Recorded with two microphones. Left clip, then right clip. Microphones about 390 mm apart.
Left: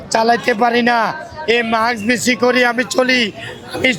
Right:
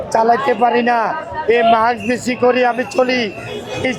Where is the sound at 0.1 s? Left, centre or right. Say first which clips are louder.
Even; left.